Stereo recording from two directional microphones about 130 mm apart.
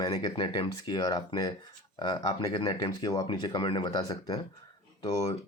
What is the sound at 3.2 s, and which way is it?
Speech, 40° left (ahead or behind).